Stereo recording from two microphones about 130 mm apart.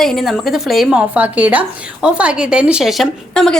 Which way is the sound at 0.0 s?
Centre (ahead or behind).